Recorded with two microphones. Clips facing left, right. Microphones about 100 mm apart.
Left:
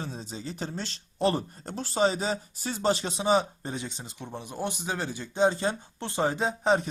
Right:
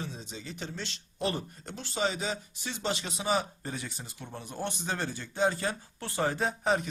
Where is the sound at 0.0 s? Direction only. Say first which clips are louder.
Left 4 dB; 35° left (ahead or behind).